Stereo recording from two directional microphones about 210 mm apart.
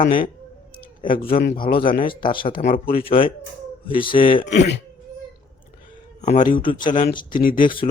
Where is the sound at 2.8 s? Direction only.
45° left (ahead or behind).